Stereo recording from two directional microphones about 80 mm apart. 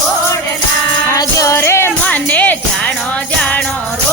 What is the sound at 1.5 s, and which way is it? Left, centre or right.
Music, left.